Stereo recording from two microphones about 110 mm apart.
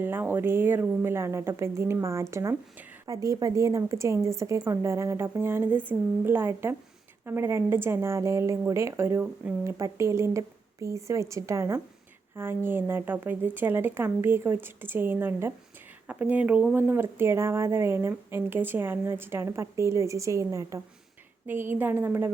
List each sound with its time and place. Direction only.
0.0 s speech: 20° right (ahead or behind)
9.6 s speech: 25° right (ahead or behind)
21.4 s speech: 20° right (ahead or behind)